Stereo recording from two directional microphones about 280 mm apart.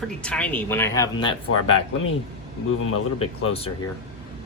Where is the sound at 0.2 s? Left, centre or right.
Centre.